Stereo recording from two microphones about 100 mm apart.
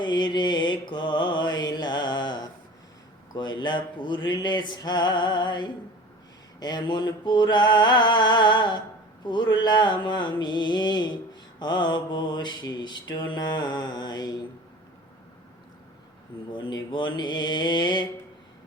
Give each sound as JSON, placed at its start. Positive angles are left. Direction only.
{"t": 0.0, "sound": "mantra", "side_deg": 50}
{"t": 16.5, "sound": "mantra", "side_deg": 50}